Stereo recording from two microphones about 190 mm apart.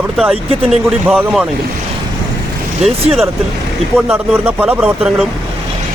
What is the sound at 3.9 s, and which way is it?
Speech, 5° right (ahead or behind).